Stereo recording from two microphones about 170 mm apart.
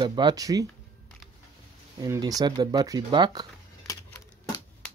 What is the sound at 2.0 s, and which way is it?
Speech, 20° right (ahead or behind).